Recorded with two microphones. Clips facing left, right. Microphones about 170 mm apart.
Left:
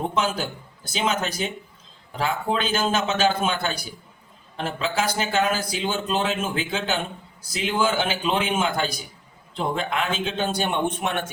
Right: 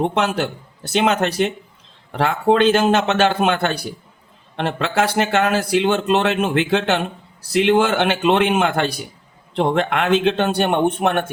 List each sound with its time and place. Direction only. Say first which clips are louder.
0.0 s a man's voice: right 6 dB; 70° right (ahead or behind)